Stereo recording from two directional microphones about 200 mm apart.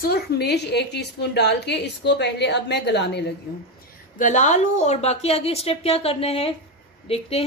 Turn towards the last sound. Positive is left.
turn(degrees=30)  # may be behind; listen again after turning